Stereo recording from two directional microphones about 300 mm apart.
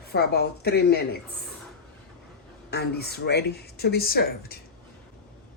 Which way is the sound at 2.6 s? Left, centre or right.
Left.